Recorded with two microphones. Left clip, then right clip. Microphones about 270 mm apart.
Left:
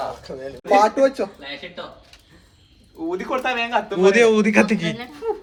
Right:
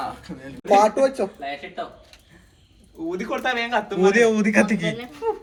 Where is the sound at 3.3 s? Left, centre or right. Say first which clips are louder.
Left 2 dB; centre.